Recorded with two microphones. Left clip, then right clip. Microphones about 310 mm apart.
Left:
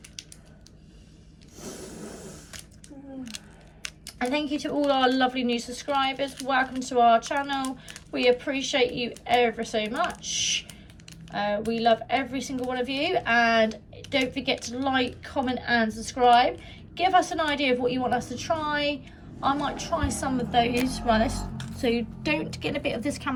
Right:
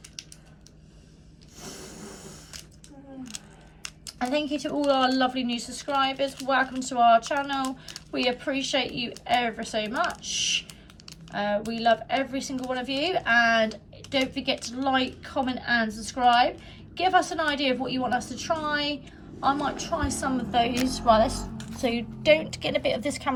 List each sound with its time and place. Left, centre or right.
1.5 s snoring: centre
3.8 s speech: centre
11.3 s speech: centre